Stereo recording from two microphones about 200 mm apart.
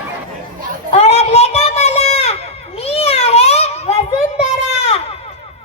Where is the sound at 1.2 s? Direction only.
30° left (ahead or behind).